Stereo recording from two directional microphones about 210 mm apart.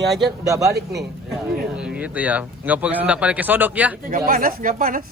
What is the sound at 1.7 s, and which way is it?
Speech, 5° right (ahead or behind).